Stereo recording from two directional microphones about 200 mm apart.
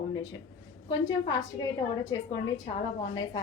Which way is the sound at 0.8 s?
20° left (ahead or behind).